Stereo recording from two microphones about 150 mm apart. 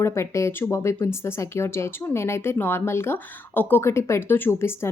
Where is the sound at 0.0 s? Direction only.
20° left (ahead or behind).